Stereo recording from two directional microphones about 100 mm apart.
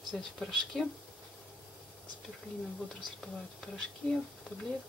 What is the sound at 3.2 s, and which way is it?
Speech, centre (ahead or behind).